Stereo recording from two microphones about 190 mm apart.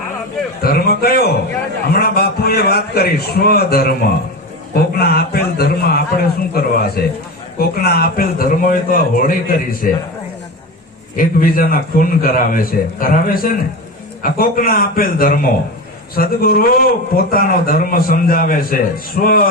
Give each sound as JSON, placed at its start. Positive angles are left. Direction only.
{"t": 0.6, "sound": "a man's voice", "side_deg": 55}
{"t": 4.9, "sound": "a man's voice", "side_deg": 55}
{"t": 11.2, "sound": "a man's voice", "side_deg": 50}